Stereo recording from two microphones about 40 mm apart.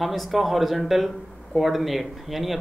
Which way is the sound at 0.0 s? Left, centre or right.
Centre.